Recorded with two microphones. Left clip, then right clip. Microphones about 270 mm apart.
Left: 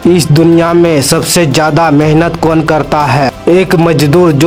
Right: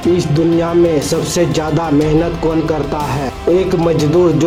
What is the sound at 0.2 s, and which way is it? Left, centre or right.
A man's voice, left.